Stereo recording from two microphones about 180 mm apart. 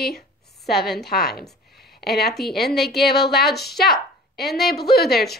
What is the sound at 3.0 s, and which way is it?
Speech, 65° left (ahead or behind).